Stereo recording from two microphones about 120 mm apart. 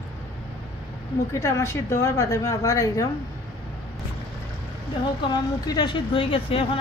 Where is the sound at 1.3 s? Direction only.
25° left (ahead or behind).